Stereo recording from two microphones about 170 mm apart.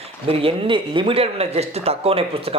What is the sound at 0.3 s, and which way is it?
A man's voice, 35° right (ahead or behind).